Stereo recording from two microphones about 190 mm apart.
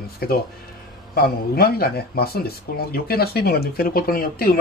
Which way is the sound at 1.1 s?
50° left (ahead or behind).